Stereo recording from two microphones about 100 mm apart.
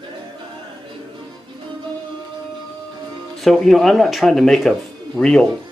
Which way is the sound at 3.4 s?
Centre (ahead or behind).